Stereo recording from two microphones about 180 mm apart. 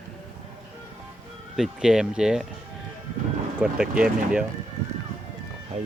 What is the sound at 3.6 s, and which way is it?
Speech, 5° right (ahead or behind).